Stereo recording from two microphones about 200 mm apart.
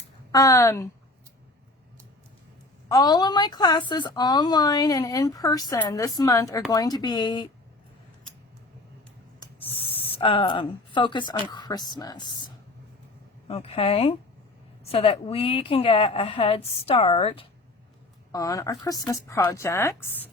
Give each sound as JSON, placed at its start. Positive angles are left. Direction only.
{"t": 0.3, "sound": "a woman's voice", "side_deg": 15}
{"t": 2.9, "sound": "a woman's voice", "side_deg": 20}
{"t": 9.4, "sound": "a sound", "side_deg": 30}
{"t": 11.4, "sound": "a woman's voice", "side_deg": 20}
{"t": 13.5, "sound": "a woman's voice", "side_deg": 30}